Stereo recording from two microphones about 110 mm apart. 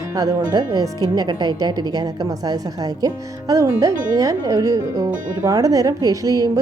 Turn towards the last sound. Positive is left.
turn(degrees=-35)  # may be behind; listen again after turning